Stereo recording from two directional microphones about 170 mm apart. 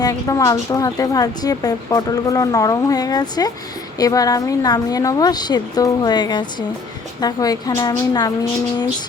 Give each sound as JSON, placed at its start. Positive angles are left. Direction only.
{"t": 0.0, "sound": "speech", "side_deg": 20}